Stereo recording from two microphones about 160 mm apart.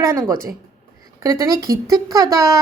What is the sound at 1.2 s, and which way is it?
A woman's voice, 20° right (ahead or behind).